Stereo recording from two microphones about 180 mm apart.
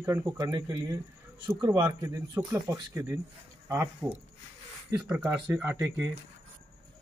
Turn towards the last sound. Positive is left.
turn(degrees=-15)  # may be behind; listen again after turning